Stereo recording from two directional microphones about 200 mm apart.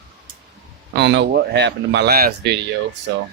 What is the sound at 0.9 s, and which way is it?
Speech, 60° right (ahead or behind).